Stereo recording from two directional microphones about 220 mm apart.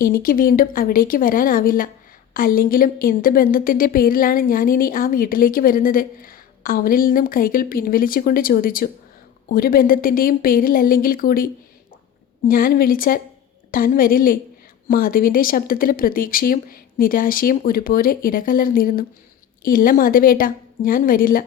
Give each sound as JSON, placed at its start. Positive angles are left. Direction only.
{"t": 0.0, "sound": "a woman's voice", "side_deg": 40}
{"t": 12.5, "sound": "a woman's voice", "side_deg": 40}